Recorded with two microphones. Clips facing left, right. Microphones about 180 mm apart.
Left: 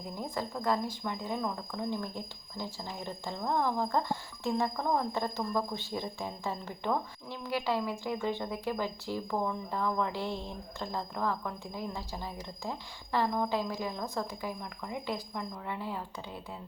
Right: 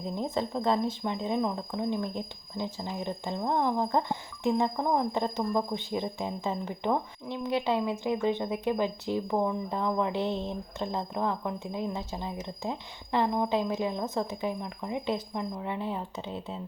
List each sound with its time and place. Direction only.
0.1 s speech: 25° right (ahead or behind)